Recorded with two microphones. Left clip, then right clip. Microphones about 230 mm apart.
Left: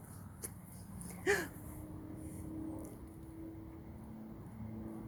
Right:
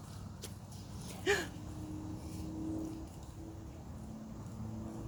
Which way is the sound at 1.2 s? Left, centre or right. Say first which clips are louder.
Right 1 dB; centre.